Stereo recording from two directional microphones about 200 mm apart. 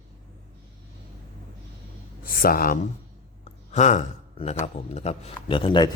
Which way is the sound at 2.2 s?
45° left (ahead or behind).